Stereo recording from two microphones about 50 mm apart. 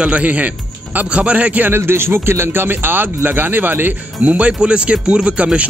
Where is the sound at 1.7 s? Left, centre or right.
Right.